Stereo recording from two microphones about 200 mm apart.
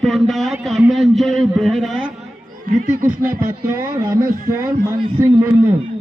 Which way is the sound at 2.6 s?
40° right (ahead or behind).